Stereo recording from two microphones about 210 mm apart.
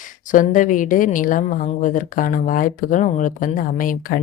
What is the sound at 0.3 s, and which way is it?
Speech, 40° left (ahead or behind).